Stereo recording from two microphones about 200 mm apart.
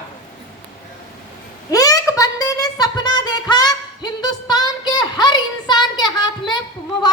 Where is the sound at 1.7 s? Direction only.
15° left (ahead or behind).